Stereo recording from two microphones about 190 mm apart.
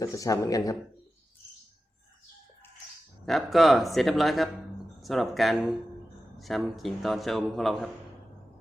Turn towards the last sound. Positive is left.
turn(degrees=0)  # may be behind; listen again after turning